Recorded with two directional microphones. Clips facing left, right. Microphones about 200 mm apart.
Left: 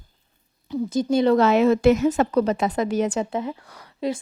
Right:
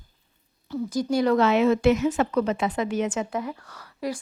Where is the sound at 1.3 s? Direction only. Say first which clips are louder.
Left 2 dB; 40° left (ahead or behind).